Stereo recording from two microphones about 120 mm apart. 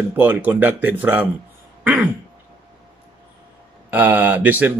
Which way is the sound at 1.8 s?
15° right (ahead or behind).